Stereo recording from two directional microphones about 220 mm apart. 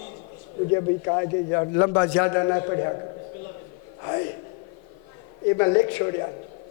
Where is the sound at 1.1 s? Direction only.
25° left (ahead or behind).